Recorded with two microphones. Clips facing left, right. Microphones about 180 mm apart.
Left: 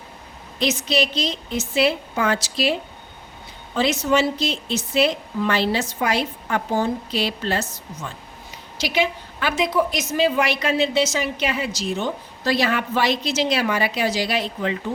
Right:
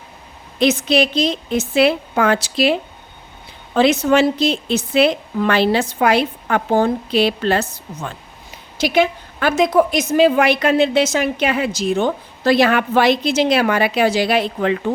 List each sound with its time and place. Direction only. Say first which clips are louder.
0.6 s a woman's voice: right 6 dB; 55° right (ahead or behind)
3.8 s a woman's voice: right 6 dB; 55° right (ahead or behind)
8.8 s a woman's voice: right 6 dB; 50° right (ahead or behind)